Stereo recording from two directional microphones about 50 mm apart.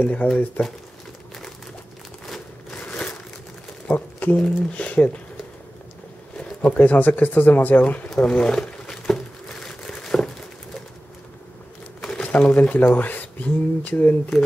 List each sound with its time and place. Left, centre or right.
0.0 s speech: left
2.7 s crumpling: left
3.8 s a sound: left
4.4 s speech: left
6.6 s speech: left
8.3 s speech: centre
9.0 s a sound: centre
10.0 s crumpling: centre
12.0 s crumpling: centre
12.3 s speech: left